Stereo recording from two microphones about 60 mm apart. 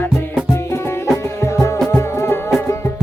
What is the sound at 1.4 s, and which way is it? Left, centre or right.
Music, left.